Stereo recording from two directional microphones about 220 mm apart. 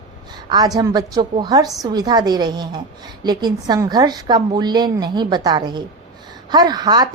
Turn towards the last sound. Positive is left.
turn(degrees=-20)  # may be behind; listen again after turning